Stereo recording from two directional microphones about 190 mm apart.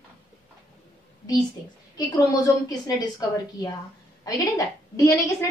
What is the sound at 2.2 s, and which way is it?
Speech, 20° left (ahead or behind).